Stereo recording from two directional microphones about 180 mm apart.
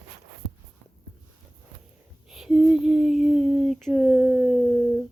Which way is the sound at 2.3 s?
5° right (ahead or behind).